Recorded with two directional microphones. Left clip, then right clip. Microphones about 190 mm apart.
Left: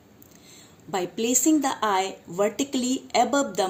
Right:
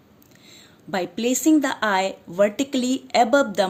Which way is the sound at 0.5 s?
50° right (ahead or behind).